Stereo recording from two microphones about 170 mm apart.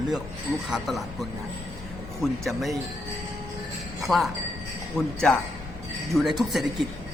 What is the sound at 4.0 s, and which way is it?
Speech, centre (ahead or behind).